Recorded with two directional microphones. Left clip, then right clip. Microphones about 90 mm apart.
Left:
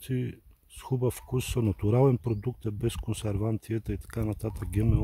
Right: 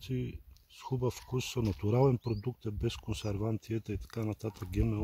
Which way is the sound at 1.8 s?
40° left (ahead or behind).